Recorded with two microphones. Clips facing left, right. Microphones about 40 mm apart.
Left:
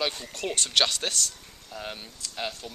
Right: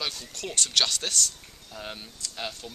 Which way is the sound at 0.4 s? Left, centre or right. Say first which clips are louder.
Left 2 dB; centre.